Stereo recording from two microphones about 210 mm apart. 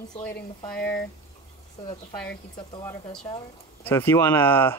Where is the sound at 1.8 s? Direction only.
20° left (ahead or behind).